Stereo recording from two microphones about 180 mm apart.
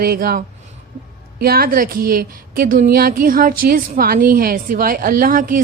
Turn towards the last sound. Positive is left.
turn(degrees=-50)  # may be behind; listen again after turning